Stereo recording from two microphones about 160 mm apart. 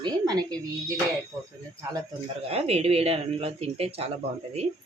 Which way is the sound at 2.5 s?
40° right (ahead or behind).